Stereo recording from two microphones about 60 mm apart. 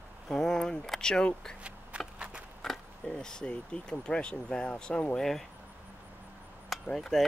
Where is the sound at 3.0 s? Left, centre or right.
Centre.